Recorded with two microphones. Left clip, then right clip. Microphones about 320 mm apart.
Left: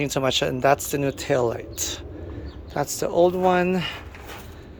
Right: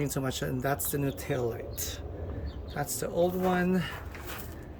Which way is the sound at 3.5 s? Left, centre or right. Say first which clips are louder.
Left 8 dB; centre.